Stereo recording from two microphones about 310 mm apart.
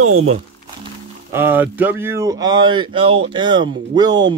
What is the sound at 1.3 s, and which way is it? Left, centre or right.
Speech, centre.